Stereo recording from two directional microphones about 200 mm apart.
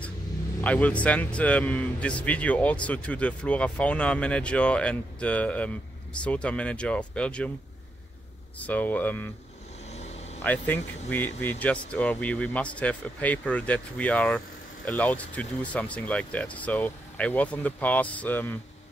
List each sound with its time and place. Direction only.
0.6 s a man's voice: 5° left (ahead or behind)
8.5 s a man's voice: 10° left (ahead or behind)
9.8 s vehicle: 35° left (ahead or behind)
10.4 s a man's voice: 10° left (ahead or behind)